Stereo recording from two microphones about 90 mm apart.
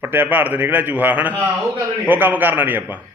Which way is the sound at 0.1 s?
20° right (ahead or behind).